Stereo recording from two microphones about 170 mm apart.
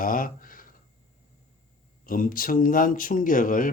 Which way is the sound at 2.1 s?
55° left (ahead or behind).